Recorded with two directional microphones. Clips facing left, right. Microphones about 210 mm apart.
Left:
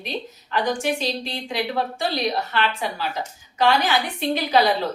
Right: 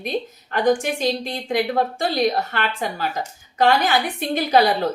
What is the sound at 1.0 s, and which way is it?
A woman's voice, 50° right (ahead or behind).